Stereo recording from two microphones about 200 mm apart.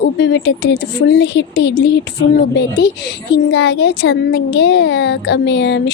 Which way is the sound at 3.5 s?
65° left (ahead or behind).